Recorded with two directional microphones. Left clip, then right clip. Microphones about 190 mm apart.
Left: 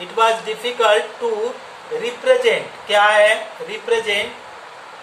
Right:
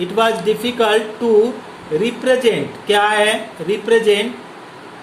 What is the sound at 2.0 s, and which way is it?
Speech, 40° right (ahead or behind).